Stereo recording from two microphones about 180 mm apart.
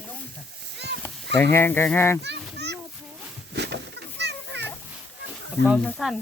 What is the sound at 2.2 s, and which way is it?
Children playing, 70° right (ahead or behind).